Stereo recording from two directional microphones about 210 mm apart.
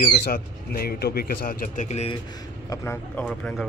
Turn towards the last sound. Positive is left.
turn(degrees=5)  # may be behind; listen again after turning